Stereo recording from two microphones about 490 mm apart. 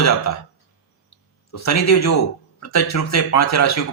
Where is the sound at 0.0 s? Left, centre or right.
Left.